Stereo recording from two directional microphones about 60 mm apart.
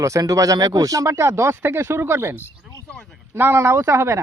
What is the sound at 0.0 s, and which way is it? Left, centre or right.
Speech, right.